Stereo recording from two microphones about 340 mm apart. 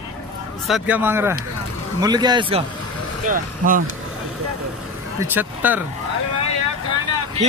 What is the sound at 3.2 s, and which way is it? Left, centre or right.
Speech, right.